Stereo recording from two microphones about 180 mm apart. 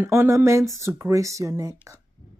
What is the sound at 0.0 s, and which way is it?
Speech, 15° right (ahead or behind).